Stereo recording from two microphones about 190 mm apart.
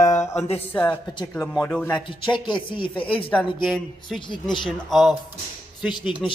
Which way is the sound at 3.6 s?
Centre (ahead or behind).